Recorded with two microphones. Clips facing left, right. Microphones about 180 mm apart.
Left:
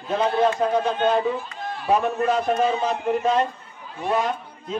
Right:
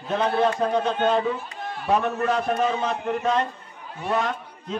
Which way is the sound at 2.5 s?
25° left (ahead or behind).